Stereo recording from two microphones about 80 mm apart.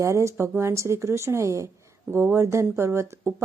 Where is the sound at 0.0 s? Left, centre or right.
Right.